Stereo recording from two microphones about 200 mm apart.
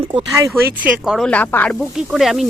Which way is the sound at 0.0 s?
25° right (ahead or behind).